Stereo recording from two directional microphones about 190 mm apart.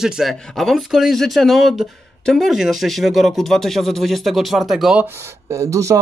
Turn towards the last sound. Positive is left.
turn(degrees=-15)  # may be behind; listen again after turning